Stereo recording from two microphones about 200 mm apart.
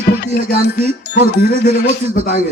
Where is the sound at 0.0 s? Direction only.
55° left (ahead or behind).